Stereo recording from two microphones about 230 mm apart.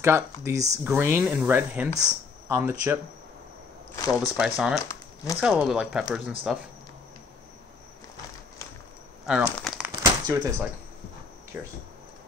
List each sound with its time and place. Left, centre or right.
0.0 s speech: centre
4.1 s speech: centre
4.8 s crumpling: centre
5.4 s speech: centre
9.2 s a sound: centre
10.0 s a sound: centre